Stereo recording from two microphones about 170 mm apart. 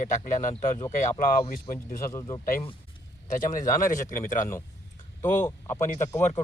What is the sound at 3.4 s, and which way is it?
Speech, 50° left (ahead or behind).